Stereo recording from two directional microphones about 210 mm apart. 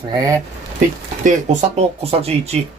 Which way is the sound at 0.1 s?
15° right (ahead or behind).